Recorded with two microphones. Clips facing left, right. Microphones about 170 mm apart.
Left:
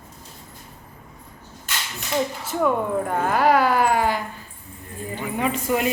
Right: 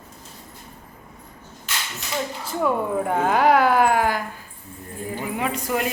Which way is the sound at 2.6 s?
10° right (ahead or behind).